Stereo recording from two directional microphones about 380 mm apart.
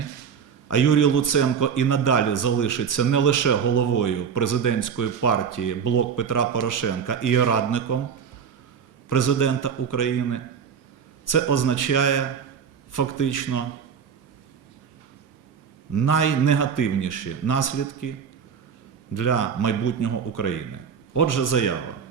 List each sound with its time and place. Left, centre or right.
0.7 s a man's voice: left
9.0 s a man's voice: left
15.9 s a man's voice: left
19.1 s a man's voice: left